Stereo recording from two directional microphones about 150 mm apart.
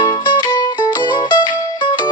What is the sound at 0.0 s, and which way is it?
Music, 30° left (ahead or behind).